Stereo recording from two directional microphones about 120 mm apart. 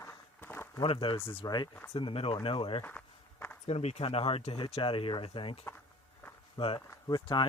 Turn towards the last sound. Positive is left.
turn(degrees=35)  # may be behind; listen again after turning